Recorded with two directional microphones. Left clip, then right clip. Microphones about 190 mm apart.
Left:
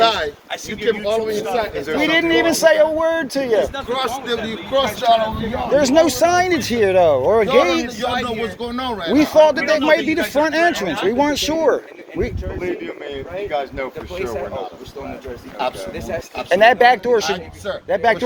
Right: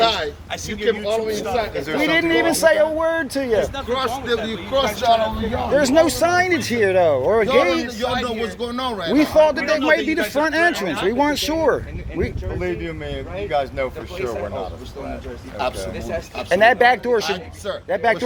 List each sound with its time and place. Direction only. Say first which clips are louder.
0.0 s a sound: left 2 dB; 60° left (ahead or behind)
1.3 s speech: left 2 dB; 5° left (ahead or behind)
2.0 s a man's voice: left 2 dB; 15° left (ahead or behind)
3.8 s a man's voice: even; 45° left (ahead or behind)
4.7 s speech: left 2 dB; 25° left (ahead or behind)
5.0 s speech: left 1 dB; 5° left (ahead or behind)
5.8 s a man's voice: left 2 dB; 10° left (ahead or behind)
8.0 s a man's voice: even; 30° left (ahead or behind)
8.6 s speech: left 1 dB; 15° right (ahead or behind)
9.1 s a man's voice: left 3 dB; 15° left (ahead or behind)
12.5 s speech: even; 55° right (ahead or behind)
15.6 s speech: left 1 dB; 10° right (ahead or behind)
16.5 s a man's voice: left 2 dB; 15° left (ahead or behind)